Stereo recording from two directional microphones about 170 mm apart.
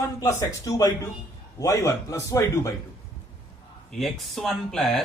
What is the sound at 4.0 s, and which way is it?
Speech, centre (ahead or behind).